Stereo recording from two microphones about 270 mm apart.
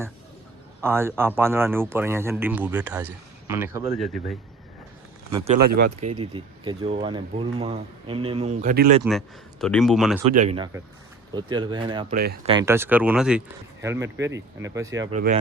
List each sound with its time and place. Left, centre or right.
0.8 s a man's voice: centre
5.5 s speech: right
6.1 s speech: centre
9.0 s speech: centre
10.3 s a man's voice: right
12.1 s speech: right
12.5 s a man's voice: centre
15.1 s speech: right